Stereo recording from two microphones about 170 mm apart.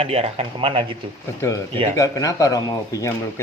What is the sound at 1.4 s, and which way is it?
Speech, 15° left (ahead or behind).